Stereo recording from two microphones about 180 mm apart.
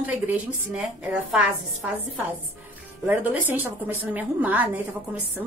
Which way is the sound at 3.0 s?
10° right (ahead or behind).